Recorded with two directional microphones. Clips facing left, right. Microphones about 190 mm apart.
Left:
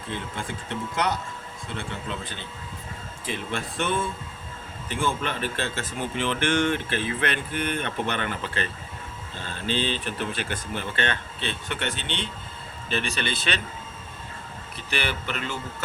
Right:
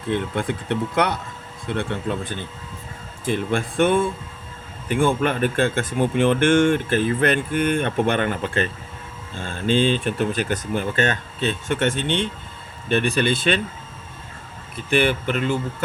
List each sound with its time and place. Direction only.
0.1 s speech: 60° right (ahead or behind)
14.8 s speech: 50° right (ahead or behind)